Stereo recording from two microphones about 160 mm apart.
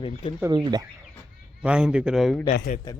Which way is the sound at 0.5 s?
25° right (ahead or behind).